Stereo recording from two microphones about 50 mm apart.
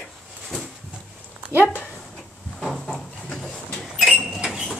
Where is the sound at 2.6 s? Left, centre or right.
Centre.